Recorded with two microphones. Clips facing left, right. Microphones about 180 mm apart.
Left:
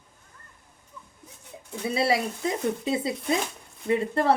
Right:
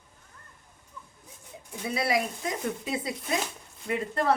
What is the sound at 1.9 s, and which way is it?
Speech, 30° left (ahead or behind).